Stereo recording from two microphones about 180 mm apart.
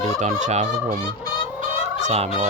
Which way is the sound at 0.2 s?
45° right (ahead or behind).